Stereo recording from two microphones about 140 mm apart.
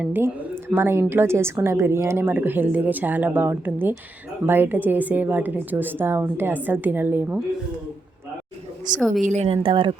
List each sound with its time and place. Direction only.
0.0 s a woman's voice: 15° right (ahead or behind)
9.0 s a woman's voice: centre (ahead or behind)
9.2 s a woman's voice: 55° right (ahead or behind)
9.6 s speech: 35° right (ahead or behind)